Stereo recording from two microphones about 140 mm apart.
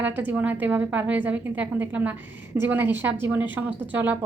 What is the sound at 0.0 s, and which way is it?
A woman's voice, 15° right (ahead or behind).